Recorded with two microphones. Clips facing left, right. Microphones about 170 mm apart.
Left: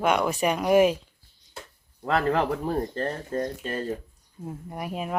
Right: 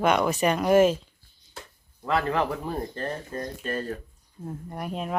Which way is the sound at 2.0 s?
35° left (ahead or behind).